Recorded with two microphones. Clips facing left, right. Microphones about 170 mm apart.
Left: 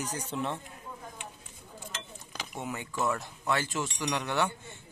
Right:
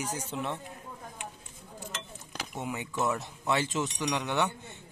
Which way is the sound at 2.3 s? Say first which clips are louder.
Right 1 dB; 10° right (ahead or behind).